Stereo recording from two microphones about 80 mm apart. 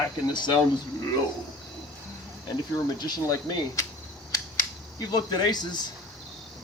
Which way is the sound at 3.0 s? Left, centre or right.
Left.